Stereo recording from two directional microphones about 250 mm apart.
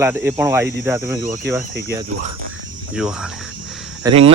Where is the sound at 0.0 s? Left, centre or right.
Centre.